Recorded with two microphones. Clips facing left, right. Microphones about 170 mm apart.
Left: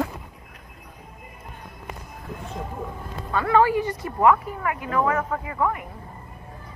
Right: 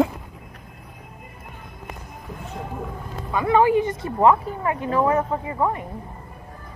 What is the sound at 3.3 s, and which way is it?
Speech, 15° right (ahead or behind).